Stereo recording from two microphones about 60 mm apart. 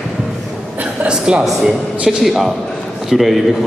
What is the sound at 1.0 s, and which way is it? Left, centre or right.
Speech, centre.